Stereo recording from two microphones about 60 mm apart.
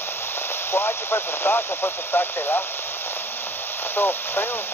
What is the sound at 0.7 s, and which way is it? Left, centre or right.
Speech, left.